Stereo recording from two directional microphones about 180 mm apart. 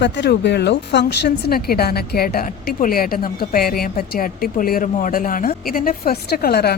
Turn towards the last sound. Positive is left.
turn(degrees=60)  # may be behind; listen again after turning